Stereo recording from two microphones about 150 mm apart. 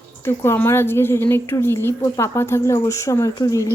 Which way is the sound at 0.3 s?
15° left (ahead or behind).